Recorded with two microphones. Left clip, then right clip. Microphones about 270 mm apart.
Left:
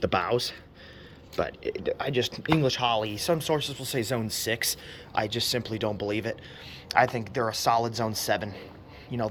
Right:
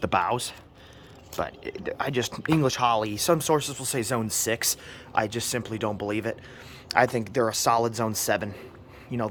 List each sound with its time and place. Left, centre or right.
0.0 s a man's voice: centre